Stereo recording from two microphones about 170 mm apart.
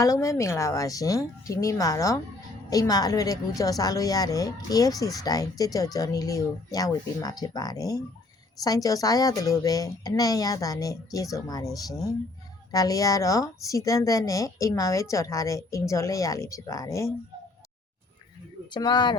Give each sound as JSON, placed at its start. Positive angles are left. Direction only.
{"t": 0.0, "sound": "a woman's voice", "side_deg": 20}
{"t": 18.7, "sound": "a woman's voice", "side_deg": 25}